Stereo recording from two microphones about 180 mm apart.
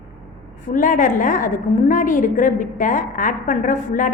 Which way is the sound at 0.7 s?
45° left (ahead or behind).